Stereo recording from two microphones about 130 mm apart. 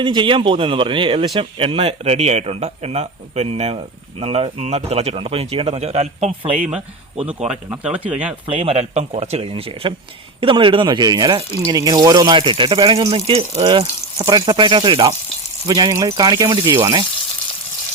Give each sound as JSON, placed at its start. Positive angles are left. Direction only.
{"t": 0.0, "sound": "speech", "side_deg": -40}
{"t": 7.9, "sound": "speech", "side_deg": -10}
{"t": 8.4, "sound": "speech", "side_deg": -45}
{"t": 14.2, "sound": "speech", "side_deg": -35}
{"t": 16.6, "sound": "speech", "side_deg": -20}